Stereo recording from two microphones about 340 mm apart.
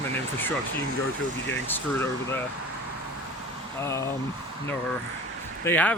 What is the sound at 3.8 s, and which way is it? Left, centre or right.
Speech, centre.